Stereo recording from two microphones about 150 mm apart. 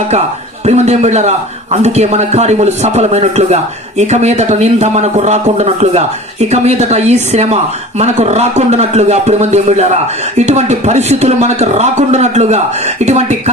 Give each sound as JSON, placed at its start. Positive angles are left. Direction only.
{"t": 0.6, "sound": "speech", "side_deg": -45}